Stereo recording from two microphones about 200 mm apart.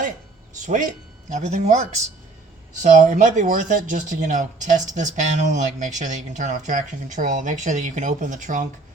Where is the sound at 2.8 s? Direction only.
40° right (ahead or behind).